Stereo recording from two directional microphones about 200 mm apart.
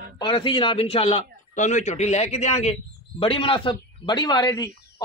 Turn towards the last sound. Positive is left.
turn(degrees=20)  # may be behind; listen again after turning